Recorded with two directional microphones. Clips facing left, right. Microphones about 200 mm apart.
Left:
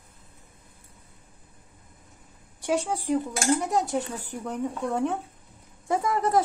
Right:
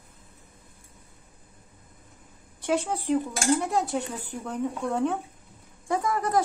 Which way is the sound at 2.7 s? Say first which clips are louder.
Even; 10° left (ahead or behind).